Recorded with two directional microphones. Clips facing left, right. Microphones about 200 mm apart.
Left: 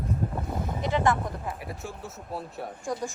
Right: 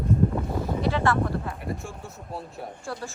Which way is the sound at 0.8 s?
15° left (ahead or behind).